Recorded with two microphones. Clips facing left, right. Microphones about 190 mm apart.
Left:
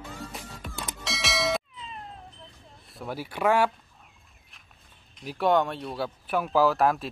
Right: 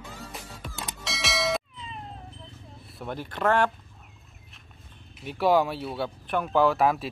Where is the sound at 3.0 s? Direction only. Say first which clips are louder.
Left 1 dB; 5° left (ahead or behind).